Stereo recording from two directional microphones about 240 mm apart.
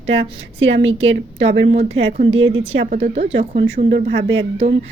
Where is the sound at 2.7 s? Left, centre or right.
Right.